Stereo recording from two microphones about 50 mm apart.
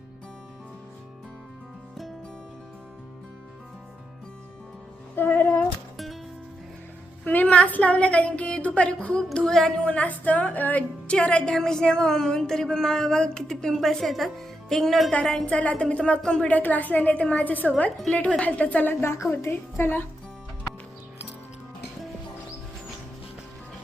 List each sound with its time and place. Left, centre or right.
5.1 s music: left
7.3 s a woman's voice: left
8.6 s a sound: left
9.8 s speech: left
11.1 s speech: left
11.5 s a sound: centre
13.7 s a woman's voice: centre
15.1 s speech: centre
16.5 s a woman's voice: left
17.4 s a woman's voice: left
19.0 s a woman's voice: left
19.7 s speech: left